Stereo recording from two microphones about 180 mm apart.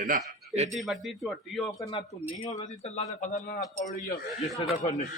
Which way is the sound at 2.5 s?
40° left (ahead or behind).